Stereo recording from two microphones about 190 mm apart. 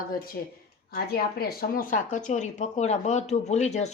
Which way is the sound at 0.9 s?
55° left (ahead or behind).